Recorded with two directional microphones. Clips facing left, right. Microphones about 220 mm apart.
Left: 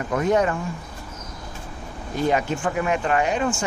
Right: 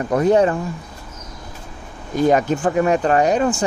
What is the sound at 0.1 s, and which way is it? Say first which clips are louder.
Speech: right 5 dB; 35° right (ahead or behind).